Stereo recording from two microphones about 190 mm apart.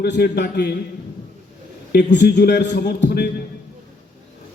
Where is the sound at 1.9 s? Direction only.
60° left (ahead or behind).